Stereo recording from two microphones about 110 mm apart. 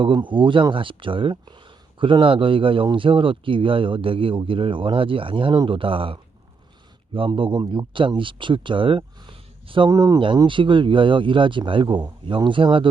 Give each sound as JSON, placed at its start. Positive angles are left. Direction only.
{"t": 0.0, "sound": "speech", "side_deg": -45}
{"t": 7.3, "sound": "speech", "side_deg": -50}
{"t": 9.9, "sound": "speech", "side_deg": -30}
{"t": 10.2, "sound": "speech", "side_deg": -50}